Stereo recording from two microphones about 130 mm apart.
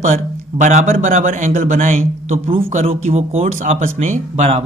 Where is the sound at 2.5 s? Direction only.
50° right (ahead or behind).